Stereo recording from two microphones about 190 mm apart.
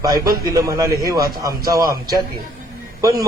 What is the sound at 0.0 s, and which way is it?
A man's voice, 20° right (ahead or behind).